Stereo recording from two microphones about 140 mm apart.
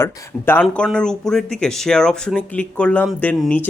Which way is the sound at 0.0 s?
15° left (ahead or behind).